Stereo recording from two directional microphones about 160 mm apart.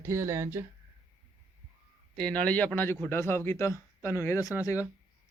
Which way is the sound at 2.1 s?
5° left (ahead or behind).